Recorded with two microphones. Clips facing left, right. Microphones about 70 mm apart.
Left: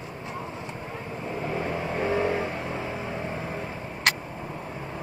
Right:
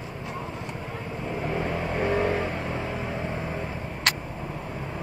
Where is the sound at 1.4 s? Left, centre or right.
Right.